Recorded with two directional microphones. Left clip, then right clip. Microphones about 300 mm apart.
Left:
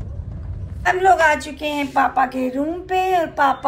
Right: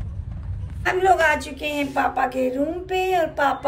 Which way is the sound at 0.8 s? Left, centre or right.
Centre.